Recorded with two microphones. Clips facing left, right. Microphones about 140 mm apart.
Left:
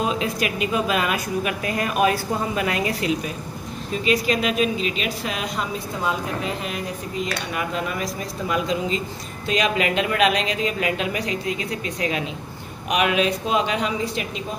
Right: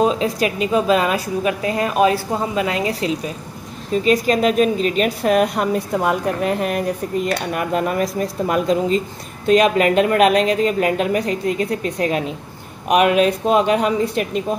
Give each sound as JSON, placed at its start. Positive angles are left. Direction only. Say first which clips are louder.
{"t": 0.0, "sound": "a woman's voice", "louder": "right 6 dB", "side_deg": -35}
{"t": 3.9, "sound": "speech", "louder": "right 5 dB", "side_deg": -40}